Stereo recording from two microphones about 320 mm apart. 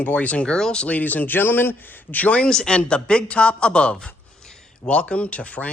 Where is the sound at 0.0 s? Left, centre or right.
Centre.